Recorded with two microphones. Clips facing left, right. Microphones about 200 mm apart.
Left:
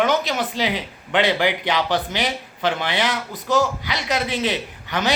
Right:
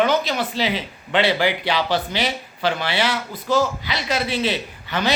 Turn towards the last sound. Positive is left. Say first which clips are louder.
# even
turn(degrees=15)  # may be behind; listen again after turning